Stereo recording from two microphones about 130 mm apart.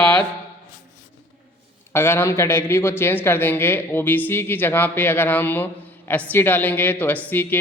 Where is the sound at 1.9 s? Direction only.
20° left (ahead or behind).